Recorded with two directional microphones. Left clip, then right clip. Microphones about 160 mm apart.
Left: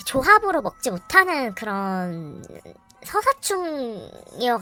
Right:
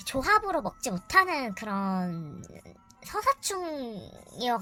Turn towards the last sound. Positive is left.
turn(degrees=35)  # may be behind; listen again after turning